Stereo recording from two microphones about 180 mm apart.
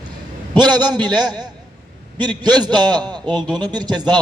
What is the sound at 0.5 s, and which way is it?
A man's voice, 25° right (ahead or behind).